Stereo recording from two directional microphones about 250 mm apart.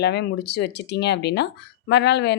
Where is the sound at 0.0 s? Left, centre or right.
Left.